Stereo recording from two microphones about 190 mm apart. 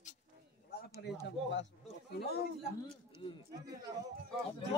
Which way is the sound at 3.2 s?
30° left (ahead or behind).